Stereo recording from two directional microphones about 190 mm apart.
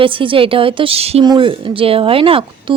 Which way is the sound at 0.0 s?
25° right (ahead or behind).